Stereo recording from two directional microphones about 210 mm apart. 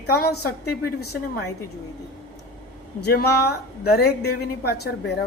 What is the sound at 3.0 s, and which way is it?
A woman's voice, 50° left (ahead or behind).